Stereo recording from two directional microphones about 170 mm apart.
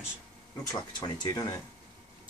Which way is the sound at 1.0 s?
25° left (ahead or behind).